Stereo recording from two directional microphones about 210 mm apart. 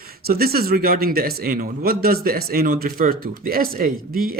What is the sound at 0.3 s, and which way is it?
A man's voice, 45° right (ahead or behind).